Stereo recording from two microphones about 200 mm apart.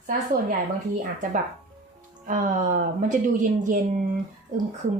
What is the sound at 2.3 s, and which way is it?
A woman's voice, 40° right (ahead or behind).